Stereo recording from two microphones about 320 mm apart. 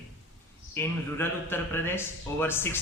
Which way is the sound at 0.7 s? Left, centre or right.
Centre.